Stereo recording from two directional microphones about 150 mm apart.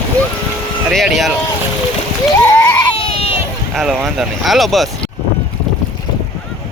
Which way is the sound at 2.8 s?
35° left (ahead or behind).